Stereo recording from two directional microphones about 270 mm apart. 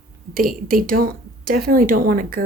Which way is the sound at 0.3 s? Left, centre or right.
Right.